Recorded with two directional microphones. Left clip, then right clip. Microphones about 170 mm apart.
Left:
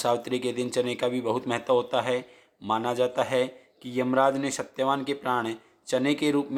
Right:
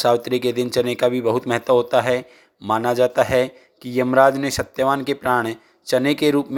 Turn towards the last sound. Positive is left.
turn(degrees=-35)  # may be behind; listen again after turning